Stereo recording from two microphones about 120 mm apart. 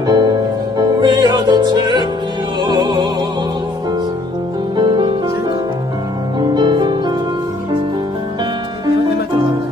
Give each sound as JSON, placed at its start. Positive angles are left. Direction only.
{"t": 0.0, "sound": "music", "side_deg": -35}
{"t": 4.7, "sound": "music", "side_deg": -40}
{"t": 6.4, "sound": "music", "side_deg": -35}